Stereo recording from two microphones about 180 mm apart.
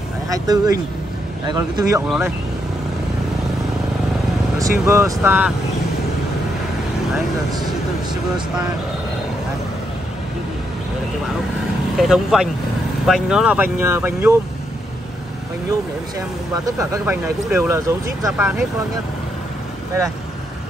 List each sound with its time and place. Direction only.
0.3 s speech: 20° right (ahead or behind)
2.0 s speech: 5° right (ahead or behind)
4.6 s speech: 15° right (ahead or behind)
12.0 s speech: centre (ahead or behind)
16.7 s speech: 15° right (ahead or behind)